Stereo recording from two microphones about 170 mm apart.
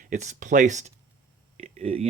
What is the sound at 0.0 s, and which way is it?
Speech, 45° right (ahead or behind).